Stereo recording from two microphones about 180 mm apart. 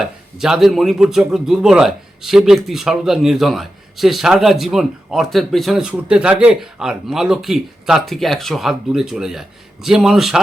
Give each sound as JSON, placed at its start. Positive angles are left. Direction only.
{"t": 0.0, "sound": "a man's voice", "side_deg": -5}